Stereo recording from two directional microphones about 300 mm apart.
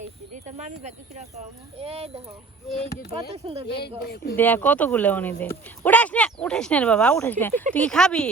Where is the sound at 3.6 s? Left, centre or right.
Left.